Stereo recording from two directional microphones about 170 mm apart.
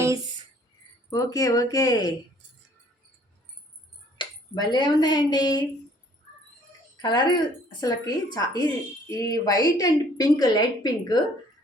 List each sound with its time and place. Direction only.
1.1 s a woman's voice: 20° left (ahead or behind)
4.2 s speech: 25° left (ahead or behind)
6.9 s a woman's voice: 25° left (ahead or behind)